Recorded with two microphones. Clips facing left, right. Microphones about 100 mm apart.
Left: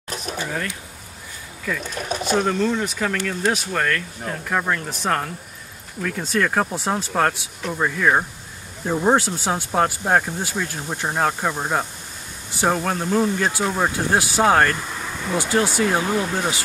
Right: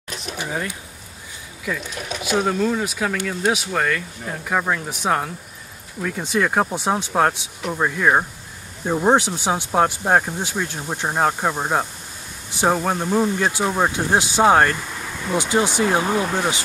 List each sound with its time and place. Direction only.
0.1 s a sound: 40° left (ahead or behind)
0.4 s speech: 15° right (ahead or behind)
2.0 s speech: 40° left (ahead or behind)
2.3 s speech: 5° right (ahead or behind); by 16.1 s 20° right (ahead or behind)
16.1 s speech: 45° right (ahead or behind)